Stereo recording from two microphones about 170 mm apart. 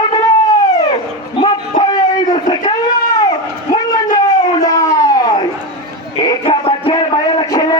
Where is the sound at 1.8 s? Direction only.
25° left (ahead or behind).